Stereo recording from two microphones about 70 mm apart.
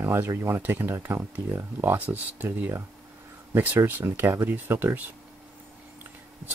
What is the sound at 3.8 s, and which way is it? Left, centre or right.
Speech, right.